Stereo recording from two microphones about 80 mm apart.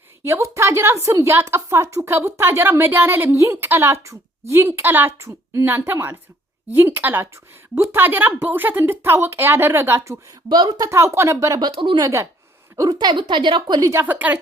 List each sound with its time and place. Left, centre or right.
0.3 s a woman's voice: right
10.5 s a woman's voice: right
10.8 s a woman's voice: right
11.6 s speech: right
12.0 s a woman's voice: right
12.9 s a woman's voice: right
14.0 s a woman's voice: right